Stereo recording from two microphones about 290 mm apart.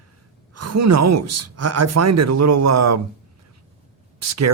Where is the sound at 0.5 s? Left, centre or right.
Right.